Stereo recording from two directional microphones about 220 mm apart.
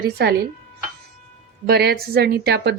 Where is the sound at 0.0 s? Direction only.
45° right (ahead or behind).